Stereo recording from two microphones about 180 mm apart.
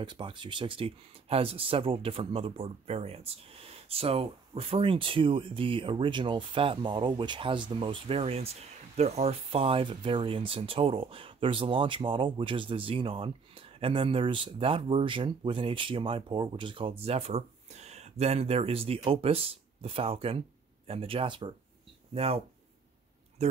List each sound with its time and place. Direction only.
0.0 s speech: 25° right (ahead or behind)